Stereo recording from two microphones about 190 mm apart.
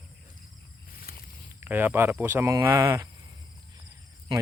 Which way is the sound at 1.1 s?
50° left (ahead or behind).